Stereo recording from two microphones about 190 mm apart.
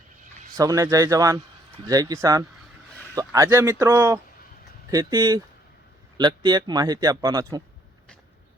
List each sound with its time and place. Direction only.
0.5 s a man's voice: 20° right (ahead or behind)